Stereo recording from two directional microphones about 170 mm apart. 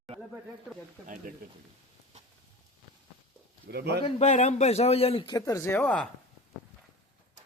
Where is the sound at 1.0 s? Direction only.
50° right (ahead or behind).